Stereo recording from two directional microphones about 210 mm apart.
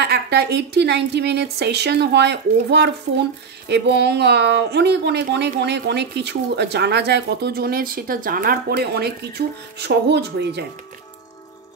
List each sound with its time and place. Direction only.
0.0 s a woman's voice: 50° right (ahead or behind)